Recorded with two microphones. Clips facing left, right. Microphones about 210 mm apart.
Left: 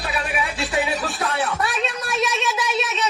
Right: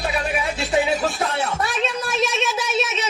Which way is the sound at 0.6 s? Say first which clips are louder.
Right 5 dB; 25° right (ahead or behind).